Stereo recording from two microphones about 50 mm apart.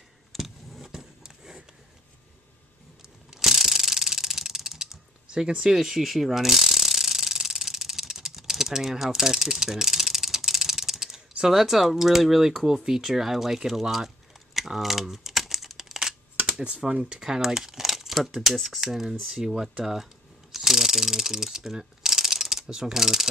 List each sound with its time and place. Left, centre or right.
0.3 s a sound: centre
3.3 s ratchet: centre
16.3 s speech: right